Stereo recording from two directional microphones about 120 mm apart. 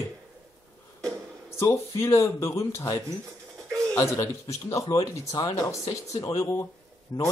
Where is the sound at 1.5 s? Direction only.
20° left (ahead or behind).